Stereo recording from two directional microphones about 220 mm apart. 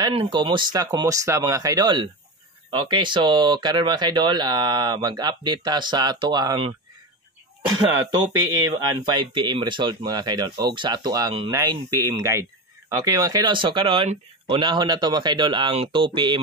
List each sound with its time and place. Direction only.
0.0 s speech: 20° right (ahead or behind)